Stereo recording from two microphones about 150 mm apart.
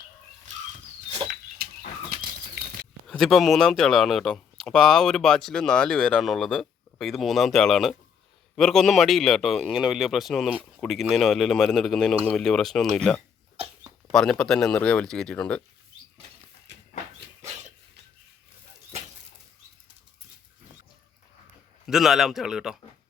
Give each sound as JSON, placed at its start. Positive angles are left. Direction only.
{"t": 1.6, "sound": "bird flight", "side_deg": -85}
{"t": 3.1, "sound": "speech", "side_deg": 0}
{"t": 21.8, "sound": "speech", "side_deg": 0}